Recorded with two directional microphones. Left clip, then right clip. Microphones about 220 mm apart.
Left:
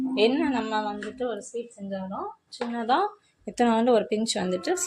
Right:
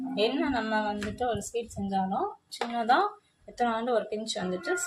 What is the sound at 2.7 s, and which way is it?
Speech, 15° left (ahead or behind).